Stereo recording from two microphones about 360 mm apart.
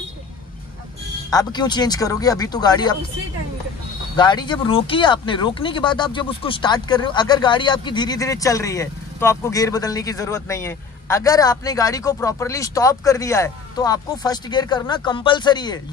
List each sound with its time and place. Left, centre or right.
1.3 s speech: centre
4.2 s speech: centre